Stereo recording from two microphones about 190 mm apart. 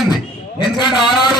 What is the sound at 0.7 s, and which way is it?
Speech, 25° left (ahead or behind).